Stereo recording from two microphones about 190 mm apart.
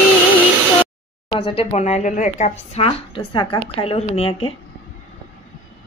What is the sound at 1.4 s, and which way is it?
Speech, 30° left (ahead or behind).